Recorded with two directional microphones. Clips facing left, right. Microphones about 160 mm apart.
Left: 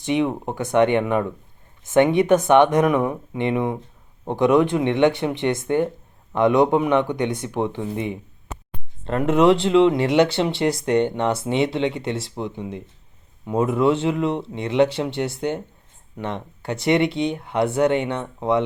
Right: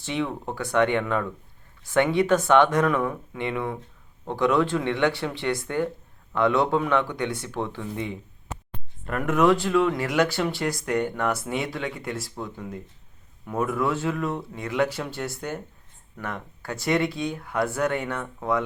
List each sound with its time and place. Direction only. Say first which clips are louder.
0.0 s speech: left 7 dB; 20° left (ahead or behind)